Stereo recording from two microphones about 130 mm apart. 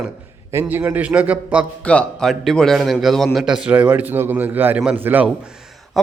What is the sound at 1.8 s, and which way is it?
Speech, 5° left (ahead or behind).